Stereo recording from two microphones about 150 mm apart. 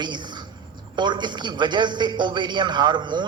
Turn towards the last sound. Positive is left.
turn(degrees=-30)  # may be behind; listen again after turning